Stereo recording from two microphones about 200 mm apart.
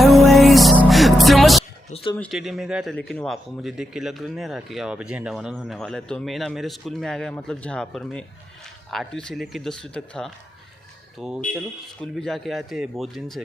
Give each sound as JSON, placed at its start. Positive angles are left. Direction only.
{"t": 0.0, "sound": "music", "side_deg": 0}
{"t": 1.9, "sound": "a sound", "side_deg": 30}
{"t": 2.1, "sound": "speech", "side_deg": 5}